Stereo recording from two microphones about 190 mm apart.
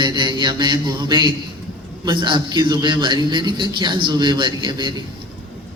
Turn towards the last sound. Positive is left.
turn(degrees=-25)  # may be behind; listen again after turning